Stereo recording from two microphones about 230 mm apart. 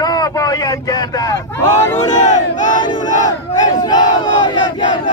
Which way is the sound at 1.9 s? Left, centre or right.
Left.